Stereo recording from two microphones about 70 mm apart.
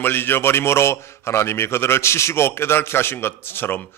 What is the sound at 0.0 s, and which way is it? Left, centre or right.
A man's voice, left.